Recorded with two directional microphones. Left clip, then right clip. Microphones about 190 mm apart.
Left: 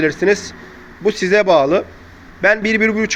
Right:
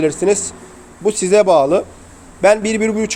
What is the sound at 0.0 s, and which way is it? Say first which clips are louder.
A man's voice: even; 10° right (ahead or behind).